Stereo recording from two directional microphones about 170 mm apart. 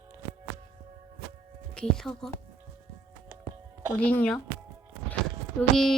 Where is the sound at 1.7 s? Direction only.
5° left (ahead or behind).